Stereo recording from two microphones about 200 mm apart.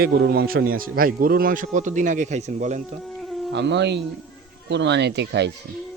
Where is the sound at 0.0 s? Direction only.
55° right (ahead or behind); by 2.8 s 35° right (ahead or behind).